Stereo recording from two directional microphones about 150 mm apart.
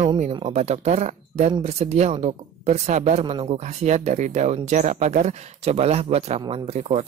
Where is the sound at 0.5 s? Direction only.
50° right (ahead or behind).